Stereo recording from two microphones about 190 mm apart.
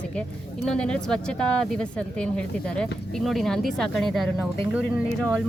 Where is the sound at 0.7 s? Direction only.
5° left (ahead or behind).